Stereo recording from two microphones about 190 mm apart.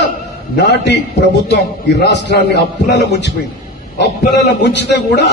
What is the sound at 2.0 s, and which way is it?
A man's voice, 65° left (ahead or behind).